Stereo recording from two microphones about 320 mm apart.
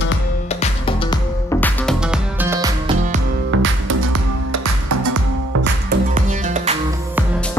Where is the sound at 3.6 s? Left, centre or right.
Right.